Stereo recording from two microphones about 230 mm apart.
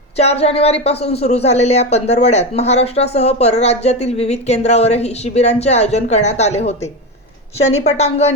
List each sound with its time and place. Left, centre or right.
0.2 s a woman's voice: left